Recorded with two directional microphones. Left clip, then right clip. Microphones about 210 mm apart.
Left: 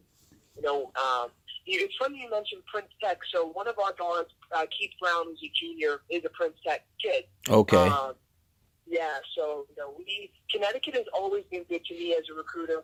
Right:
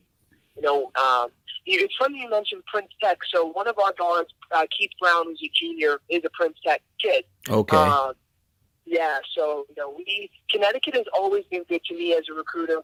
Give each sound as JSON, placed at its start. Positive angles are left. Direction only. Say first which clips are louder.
{"t": 0.6, "sound": "a man's voice", "louder": "right 7 dB", "side_deg": -40}
{"t": 7.4, "sound": "speech", "louder": "left 2 dB", "side_deg": -20}
{"t": 7.8, "sound": "a man's voice", "louder": "right 5 dB", "side_deg": -40}